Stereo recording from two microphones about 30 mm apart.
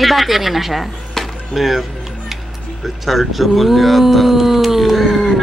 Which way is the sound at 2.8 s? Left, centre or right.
Centre.